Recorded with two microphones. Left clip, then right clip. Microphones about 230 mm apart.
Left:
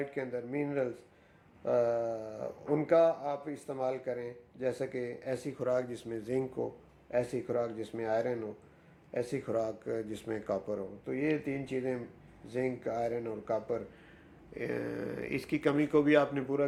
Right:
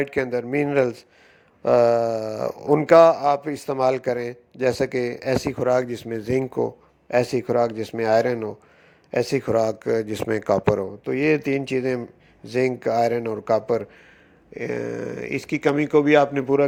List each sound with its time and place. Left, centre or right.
0.0 s speech: right